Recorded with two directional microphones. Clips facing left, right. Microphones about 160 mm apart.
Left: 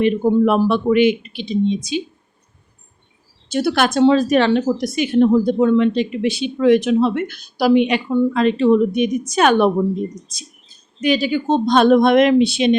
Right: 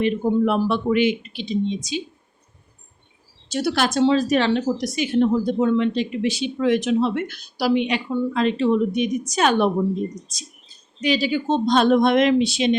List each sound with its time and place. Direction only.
0.0 s speech: 60° left (ahead or behind)
3.5 s speech: 55° left (ahead or behind)
11.0 s speech: 55° left (ahead or behind)